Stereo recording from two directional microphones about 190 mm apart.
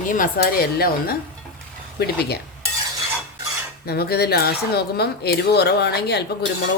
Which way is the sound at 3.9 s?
55° left (ahead or behind).